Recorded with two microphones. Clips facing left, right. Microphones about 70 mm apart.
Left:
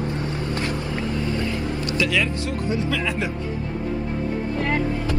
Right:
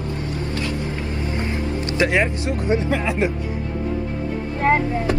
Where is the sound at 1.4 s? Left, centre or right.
Right.